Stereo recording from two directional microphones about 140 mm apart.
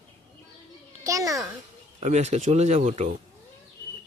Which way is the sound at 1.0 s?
25° right (ahead or behind).